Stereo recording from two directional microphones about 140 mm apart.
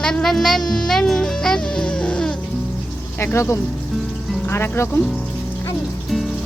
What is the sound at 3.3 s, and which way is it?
Speech, 20° left (ahead or behind).